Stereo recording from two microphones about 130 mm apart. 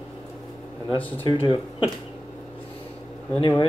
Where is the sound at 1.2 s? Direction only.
40° left (ahead or behind).